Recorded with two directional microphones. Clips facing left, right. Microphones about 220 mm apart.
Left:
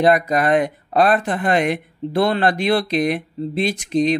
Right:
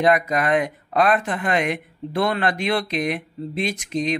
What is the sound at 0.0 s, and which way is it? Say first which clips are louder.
Speech: left 3 dB; 35° left (ahead or behind).